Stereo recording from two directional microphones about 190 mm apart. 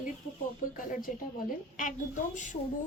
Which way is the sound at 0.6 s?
45° left (ahead or behind).